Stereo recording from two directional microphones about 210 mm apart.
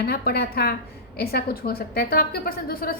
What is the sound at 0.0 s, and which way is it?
A woman's voice, 50° left (ahead or behind).